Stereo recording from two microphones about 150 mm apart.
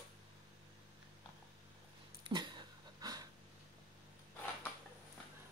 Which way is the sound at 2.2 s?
30° right (ahead or behind).